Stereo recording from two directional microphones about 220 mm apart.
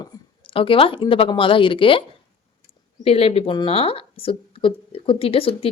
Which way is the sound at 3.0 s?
25° left (ahead or behind).